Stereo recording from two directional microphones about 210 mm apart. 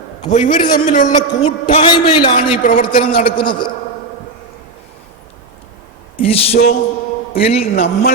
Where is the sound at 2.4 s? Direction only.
35° left (ahead or behind).